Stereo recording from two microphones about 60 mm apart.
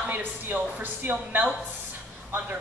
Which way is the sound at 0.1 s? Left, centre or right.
Right.